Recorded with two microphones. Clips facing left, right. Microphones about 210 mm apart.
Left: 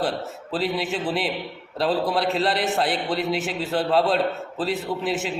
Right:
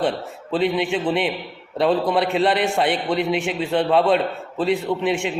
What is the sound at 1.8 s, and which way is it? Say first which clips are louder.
A man's voice: right 4 dB; centre (ahead or behind).